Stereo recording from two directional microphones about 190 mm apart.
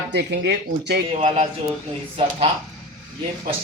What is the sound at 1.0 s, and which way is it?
Speech, 35° right (ahead or behind).